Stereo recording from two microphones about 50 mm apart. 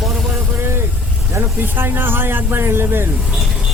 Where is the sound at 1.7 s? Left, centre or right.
Right.